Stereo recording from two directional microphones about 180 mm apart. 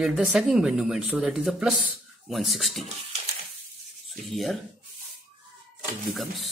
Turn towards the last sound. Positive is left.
turn(degrees=0)  # may be behind; listen again after turning